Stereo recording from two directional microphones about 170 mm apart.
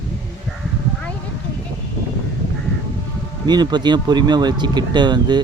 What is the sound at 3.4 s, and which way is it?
Speech, 25° right (ahead or behind).